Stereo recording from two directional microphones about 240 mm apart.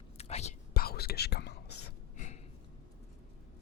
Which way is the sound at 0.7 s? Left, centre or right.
Left.